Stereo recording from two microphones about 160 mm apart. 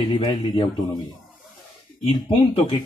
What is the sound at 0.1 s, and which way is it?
Speech, 30° left (ahead or behind).